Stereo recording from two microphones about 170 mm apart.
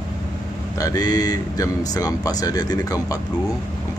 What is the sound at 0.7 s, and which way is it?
Speech, 20° left (ahead or behind).